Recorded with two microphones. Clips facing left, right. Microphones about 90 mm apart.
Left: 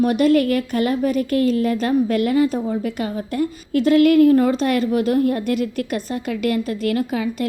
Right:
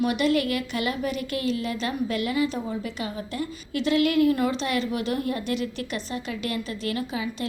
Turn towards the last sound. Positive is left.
turn(degrees=50)  # may be behind; listen again after turning